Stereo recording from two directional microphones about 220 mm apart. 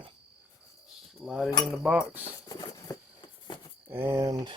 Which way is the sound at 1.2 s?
5° right (ahead or behind).